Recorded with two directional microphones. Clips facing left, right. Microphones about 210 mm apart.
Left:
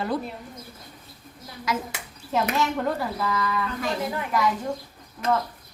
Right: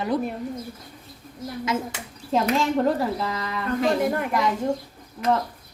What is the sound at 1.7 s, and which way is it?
Speech, 25° right (ahead or behind).